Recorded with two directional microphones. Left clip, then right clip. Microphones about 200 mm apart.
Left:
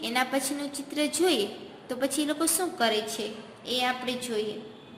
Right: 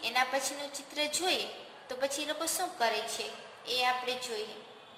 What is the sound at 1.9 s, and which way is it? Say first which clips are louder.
A woman's voice: left 5 dB; 15° left (ahead or behind).